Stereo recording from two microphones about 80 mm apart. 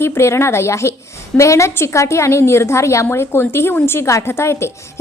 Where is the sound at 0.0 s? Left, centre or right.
Left.